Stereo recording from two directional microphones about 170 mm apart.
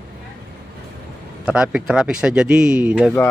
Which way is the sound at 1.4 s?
5° right (ahead or behind).